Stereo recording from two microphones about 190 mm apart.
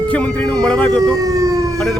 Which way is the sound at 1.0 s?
20° right (ahead or behind).